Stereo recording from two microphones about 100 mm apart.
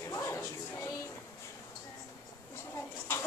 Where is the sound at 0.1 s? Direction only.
30° left (ahead or behind).